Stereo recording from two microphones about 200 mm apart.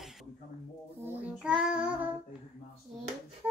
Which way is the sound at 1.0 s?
5° right (ahead or behind).